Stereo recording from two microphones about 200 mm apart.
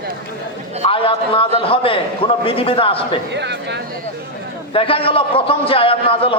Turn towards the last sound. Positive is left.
turn(degrees=25)  # may be behind; listen again after turning